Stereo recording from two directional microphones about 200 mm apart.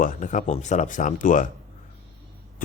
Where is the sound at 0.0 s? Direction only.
40° left (ahead or behind).